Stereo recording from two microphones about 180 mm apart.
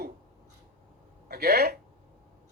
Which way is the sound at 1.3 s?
60° right (ahead or behind).